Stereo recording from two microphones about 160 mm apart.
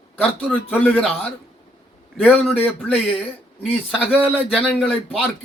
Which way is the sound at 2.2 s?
10° left (ahead or behind).